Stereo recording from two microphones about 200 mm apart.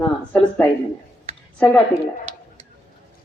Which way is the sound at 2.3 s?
35° right (ahead or behind).